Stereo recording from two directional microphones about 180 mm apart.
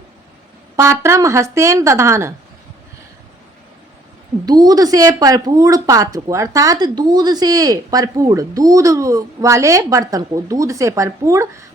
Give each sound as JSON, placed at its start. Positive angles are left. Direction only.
{"t": 0.8, "sound": "speech", "side_deg": -15}
{"t": 4.4, "sound": "a woman's voice", "side_deg": -20}